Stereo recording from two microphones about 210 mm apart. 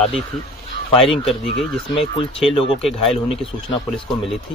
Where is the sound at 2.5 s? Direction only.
25° left (ahead or behind).